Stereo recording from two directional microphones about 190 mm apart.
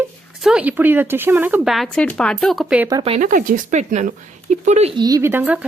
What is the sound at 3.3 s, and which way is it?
Speech, 45° right (ahead or behind).